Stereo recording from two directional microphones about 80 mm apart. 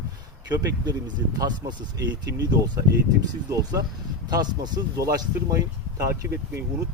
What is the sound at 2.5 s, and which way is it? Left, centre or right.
Speech, right.